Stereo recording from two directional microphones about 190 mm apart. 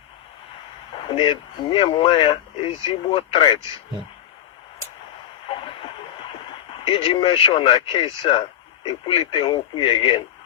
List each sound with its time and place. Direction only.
1.0 s speech: 25° left (ahead or behind)
5.5 s a sound: 30° left (ahead or behind)
6.8 s speech: 30° left (ahead or behind)